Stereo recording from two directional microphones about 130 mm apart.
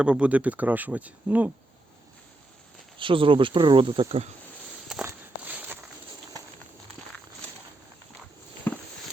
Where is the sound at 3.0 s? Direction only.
40° right (ahead or behind).